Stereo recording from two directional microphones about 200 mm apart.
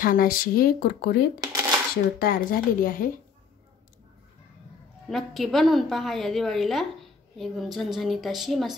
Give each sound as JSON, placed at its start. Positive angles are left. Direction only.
{"t": 0.0, "sound": "speech", "side_deg": 45}
{"t": 1.4, "sound": "dishes", "side_deg": -15}
{"t": 2.1, "sound": "speech", "side_deg": 45}
{"t": 5.1, "sound": "a woman's voice", "side_deg": 0}